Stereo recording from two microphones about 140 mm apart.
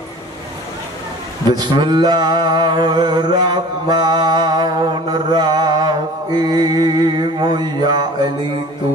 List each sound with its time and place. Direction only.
1.6 s music: 30° right (ahead or behind)
5.3 s mantra: 30° right (ahead or behind)